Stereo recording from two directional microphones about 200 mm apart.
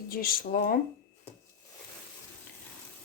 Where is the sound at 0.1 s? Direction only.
45° left (ahead or behind).